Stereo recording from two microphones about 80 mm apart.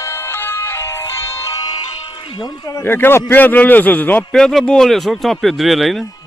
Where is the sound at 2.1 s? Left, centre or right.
Left.